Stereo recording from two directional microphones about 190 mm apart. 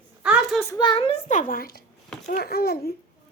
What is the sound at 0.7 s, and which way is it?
A woman's voice, 25° left (ahead or behind).